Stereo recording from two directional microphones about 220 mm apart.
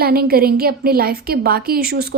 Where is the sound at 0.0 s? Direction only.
45° right (ahead or behind).